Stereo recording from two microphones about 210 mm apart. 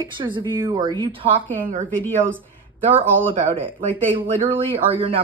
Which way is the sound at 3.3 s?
25° right (ahead or behind).